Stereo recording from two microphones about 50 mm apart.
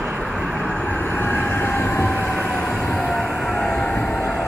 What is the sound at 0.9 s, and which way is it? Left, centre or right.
Vehicle, left.